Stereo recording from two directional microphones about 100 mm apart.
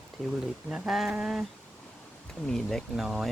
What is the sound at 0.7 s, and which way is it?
Speech, 5° right (ahead or behind).